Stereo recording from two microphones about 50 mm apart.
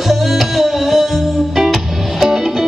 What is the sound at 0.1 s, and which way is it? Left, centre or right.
Music, centre.